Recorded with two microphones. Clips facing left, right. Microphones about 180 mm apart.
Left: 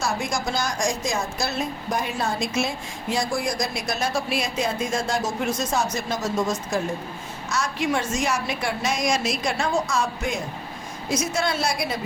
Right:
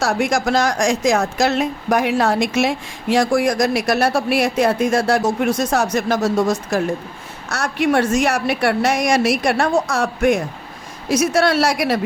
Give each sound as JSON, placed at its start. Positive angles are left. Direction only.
{"t": 0.0, "sound": "a woman's voice", "side_deg": -75}